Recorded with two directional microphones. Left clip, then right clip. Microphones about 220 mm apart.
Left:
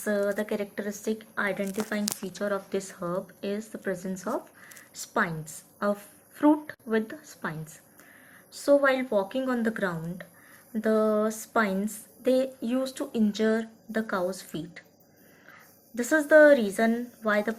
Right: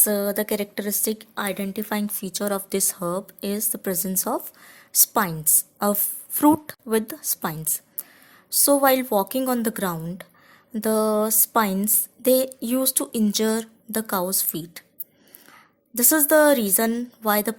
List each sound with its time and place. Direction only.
0.0 s a woman's voice: 55° right (ahead or behind)
16.0 s a woman's voice: 55° right (ahead or behind)